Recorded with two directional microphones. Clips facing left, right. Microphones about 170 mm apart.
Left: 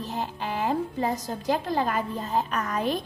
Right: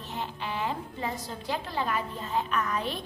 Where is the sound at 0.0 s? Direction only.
40° left (ahead or behind).